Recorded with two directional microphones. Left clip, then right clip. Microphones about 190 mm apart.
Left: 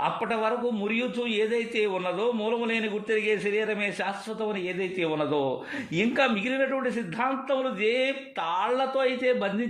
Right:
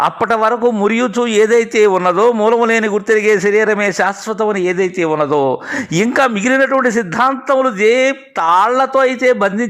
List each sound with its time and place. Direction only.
0.0 s a man's voice: 45° right (ahead or behind)